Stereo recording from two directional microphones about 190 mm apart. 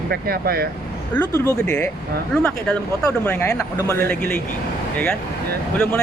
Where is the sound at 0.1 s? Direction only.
55° right (ahead or behind).